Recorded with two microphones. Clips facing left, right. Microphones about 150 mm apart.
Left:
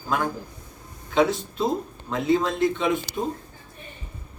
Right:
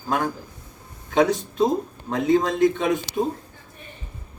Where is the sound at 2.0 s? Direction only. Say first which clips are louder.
Right 2 dB; 40° right (ahead or behind).